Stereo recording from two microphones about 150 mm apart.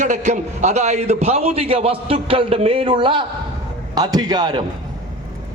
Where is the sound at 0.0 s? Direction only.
50° right (ahead or behind); by 4.6 s 30° right (ahead or behind).